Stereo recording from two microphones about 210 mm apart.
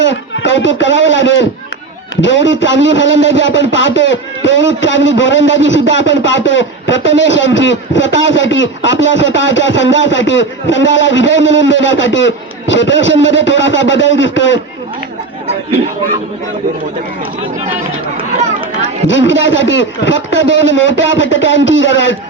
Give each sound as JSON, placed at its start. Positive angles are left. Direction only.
{"t": 0.0, "sound": "a man's voice", "side_deg": 60}
{"t": 18.8, "sound": "a man's voice", "side_deg": 60}